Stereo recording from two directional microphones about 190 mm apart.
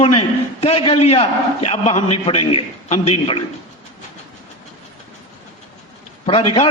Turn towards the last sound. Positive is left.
turn(degrees=30)  # may be behind; listen again after turning